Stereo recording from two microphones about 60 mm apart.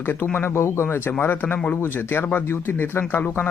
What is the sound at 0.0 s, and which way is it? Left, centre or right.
Speech, left.